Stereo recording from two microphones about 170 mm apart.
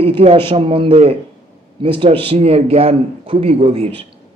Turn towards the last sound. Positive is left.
turn(degrees=-35)  # may be behind; listen again after turning